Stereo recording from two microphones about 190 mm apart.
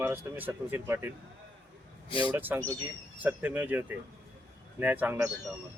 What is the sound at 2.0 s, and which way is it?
Speech, 25° left (ahead or behind).